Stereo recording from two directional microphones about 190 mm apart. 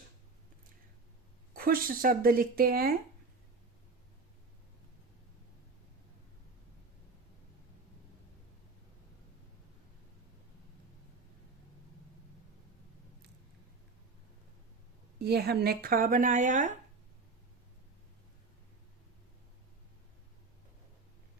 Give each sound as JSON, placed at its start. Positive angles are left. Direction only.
{"t": 1.5, "sound": "speech", "side_deg": -50}
{"t": 15.2, "sound": "speech", "side_deg": -60}